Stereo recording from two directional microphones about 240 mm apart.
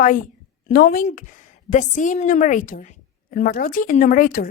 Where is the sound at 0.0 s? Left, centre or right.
Left.